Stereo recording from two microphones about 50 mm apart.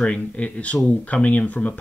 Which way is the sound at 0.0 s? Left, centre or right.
Left.